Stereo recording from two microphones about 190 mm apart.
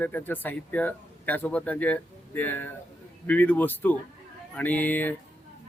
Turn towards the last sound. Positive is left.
turn(degrees=10)  # may be behind; listen again after turning